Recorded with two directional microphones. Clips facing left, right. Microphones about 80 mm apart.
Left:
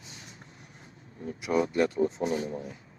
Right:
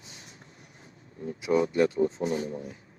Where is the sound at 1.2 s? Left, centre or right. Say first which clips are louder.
Right 2 dB; right.